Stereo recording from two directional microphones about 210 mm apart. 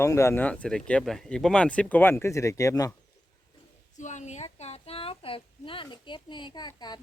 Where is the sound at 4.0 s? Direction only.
35° left (ahead or behind).